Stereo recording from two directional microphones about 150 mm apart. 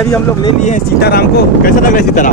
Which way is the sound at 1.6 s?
65° left (ahead or behind).